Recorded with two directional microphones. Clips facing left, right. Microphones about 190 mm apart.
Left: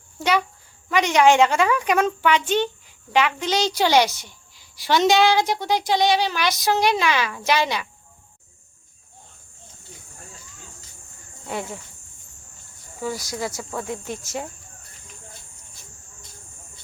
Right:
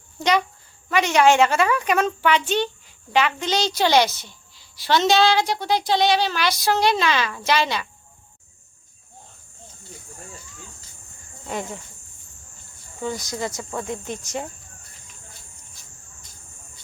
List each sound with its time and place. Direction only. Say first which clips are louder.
0.2 s a woman's voice: right 1 dB; 10° left (ahead or behind)
13.0 s speech: even; 5° left (ahead or behind)
14.0 s speech: even; 15° right (ahead or behind)